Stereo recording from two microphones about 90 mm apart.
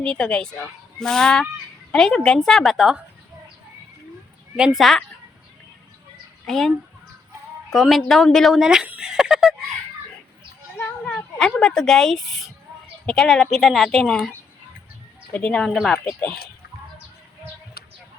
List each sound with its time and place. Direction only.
0.0 s speech: 10° left (ahead or behind)
4.5 s a woman's voice: 5° right (ahead or behind)
6.4 s a woman's voice: centre (ahead or behind)
8.9 s a sound: 10° right (ahead or behind)
10.8 s a sound: 20° left (ahead or behind)
11.3 s a woman's voice: 10° left (ahead or behind)